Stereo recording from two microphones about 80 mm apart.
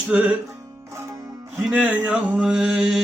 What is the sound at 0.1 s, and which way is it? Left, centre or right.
Mantra, centre.